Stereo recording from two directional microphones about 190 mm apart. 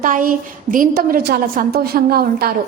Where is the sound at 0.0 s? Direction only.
45° right (ahead or behind).